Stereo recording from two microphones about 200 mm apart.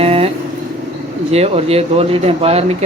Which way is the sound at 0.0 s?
30° right (ahead or behind).